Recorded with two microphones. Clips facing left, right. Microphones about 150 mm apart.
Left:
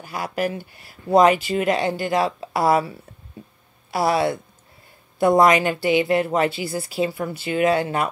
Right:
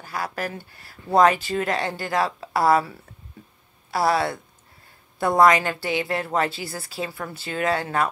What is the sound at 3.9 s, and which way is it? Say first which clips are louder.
A woman's voice: left 2 dB; 15° left (ahead or behind).